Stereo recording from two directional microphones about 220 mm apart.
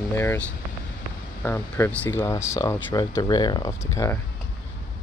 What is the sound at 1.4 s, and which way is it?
Speech, 10° left (ahead or behind).